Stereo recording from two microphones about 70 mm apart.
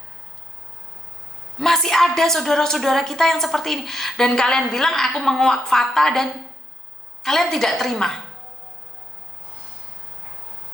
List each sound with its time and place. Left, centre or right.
1.5 s a woman's voice: centre